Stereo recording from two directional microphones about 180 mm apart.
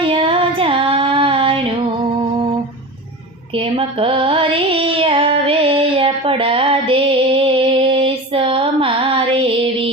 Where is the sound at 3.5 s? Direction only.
30° right (ahead or behind).